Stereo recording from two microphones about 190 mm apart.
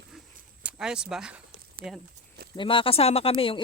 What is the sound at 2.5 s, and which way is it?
Speech, 25° left (ahead or behind).